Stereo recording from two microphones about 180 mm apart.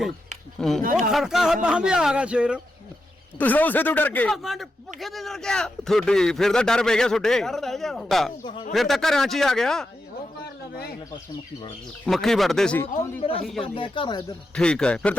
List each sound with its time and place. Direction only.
0.8 s speech: 50° right (ahead or behind)
1.1 s speech: centre (ahead or behind)
3.3 s speech: 10° left (ahead or behind)
4.4 s speech: centre (ahead or behind)
12.0 s speech: centre (ahead or behind)
13.7 s speech: 30° left (ahead or behind)
14.5 s speech: 5° left (ahead or behind)